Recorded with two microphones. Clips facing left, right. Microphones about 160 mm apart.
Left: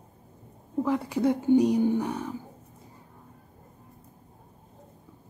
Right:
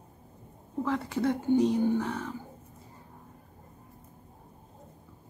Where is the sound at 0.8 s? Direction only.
15° left (ahead or behind).